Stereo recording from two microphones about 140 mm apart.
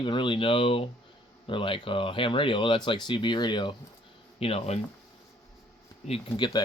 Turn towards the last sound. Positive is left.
turn(degrees=30)  # may be behind; listen again after turning